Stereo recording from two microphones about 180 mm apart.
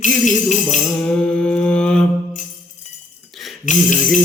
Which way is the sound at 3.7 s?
45° left (ahead or behind).